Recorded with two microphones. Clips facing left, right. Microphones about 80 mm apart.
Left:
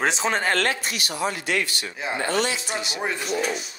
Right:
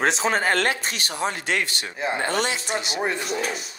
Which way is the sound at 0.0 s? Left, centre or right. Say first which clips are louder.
Right 1 dB; centre.